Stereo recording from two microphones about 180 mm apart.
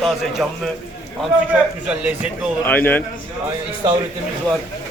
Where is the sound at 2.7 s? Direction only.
10° left (ahead or behind).